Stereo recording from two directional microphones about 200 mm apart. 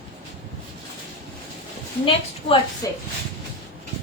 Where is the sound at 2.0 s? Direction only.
25° left (ahead or behind).